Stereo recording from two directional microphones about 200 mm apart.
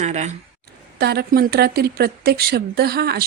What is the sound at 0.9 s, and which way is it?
Speech, 55° right (ahead or behind).